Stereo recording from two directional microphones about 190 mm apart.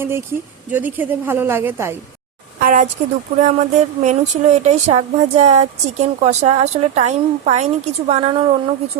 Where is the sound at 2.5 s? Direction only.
45° right (ahead or behind).